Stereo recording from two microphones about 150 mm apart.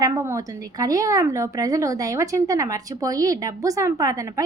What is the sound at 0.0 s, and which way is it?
Speech, 20° right (ahead or behind).